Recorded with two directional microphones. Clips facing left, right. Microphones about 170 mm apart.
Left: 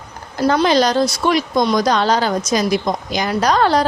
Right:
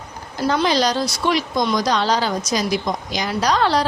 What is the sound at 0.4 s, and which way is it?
Speech, 50° left (ahead or behind).